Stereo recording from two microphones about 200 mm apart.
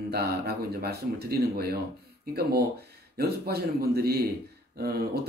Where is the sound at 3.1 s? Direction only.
50° right (ahead or behind).